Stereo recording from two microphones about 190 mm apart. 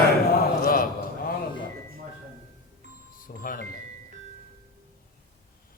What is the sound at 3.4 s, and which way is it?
Music, 50° left (ahead or behind).